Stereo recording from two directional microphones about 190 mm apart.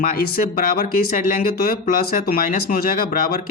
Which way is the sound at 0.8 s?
50° left (ahead or behind).